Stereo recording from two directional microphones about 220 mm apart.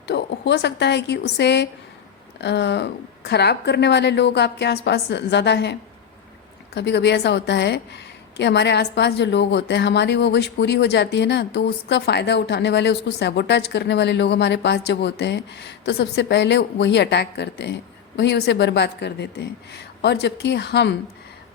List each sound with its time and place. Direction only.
0.1 s a woman's voice: 50° left (ahead or behind)
6.7 s a woman's voice: 50° left (ahead or behind)